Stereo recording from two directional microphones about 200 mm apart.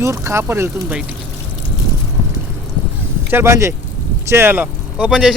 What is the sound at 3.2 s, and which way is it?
Speech, 10° right (ahead or behind).